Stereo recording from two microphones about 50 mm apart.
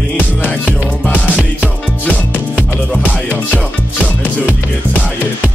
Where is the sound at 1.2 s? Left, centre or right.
Right.